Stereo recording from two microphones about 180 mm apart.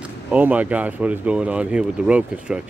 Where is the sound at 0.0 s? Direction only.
10° right (ahead or behind).